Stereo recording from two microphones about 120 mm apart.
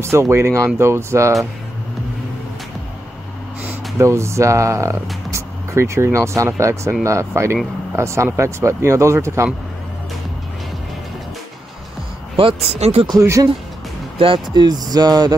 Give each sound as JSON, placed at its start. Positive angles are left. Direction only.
{"t": 0.0, "sound": "speech", "side_deg": -20}
{"t": 4.0, "sound": "speech", "side_deg": -25}
{"t": 12.4, "sound": "speech", "side_deg": -55}
{"t": 13.2, "sound": "speech", "side_deg": -25}
{"t": 14.1, "sound": "speech", "side_deg": -50}